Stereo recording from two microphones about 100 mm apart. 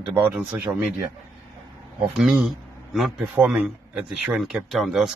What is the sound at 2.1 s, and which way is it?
Speech, 5° right (ahead or behind).